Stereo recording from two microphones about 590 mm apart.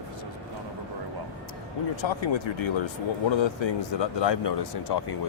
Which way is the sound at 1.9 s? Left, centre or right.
Left.